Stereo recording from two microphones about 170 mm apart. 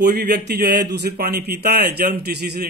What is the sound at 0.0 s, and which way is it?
A man's voice, 70° right (ahead or behind).